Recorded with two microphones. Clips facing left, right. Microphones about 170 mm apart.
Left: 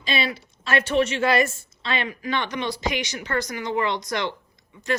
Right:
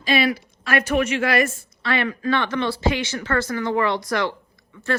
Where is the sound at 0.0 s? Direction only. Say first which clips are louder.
Right 6 dB; 25° left (ahead or behind).